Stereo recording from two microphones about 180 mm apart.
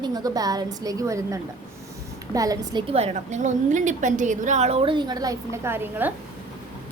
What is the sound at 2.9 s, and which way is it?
A woman's voice, 40° right (ahead or behind).